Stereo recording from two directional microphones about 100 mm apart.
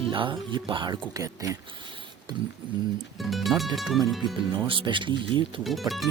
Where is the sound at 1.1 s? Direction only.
35° right (ahead or behind).